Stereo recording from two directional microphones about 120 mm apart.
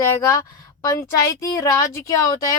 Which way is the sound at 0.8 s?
25° left (ahead or behind).